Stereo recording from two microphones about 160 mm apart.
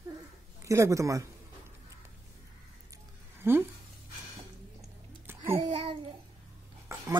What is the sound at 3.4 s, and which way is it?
Speech, 15° right (ahead or behind).